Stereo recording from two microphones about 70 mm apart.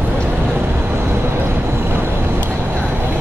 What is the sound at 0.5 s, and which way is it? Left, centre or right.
Vehicle, right.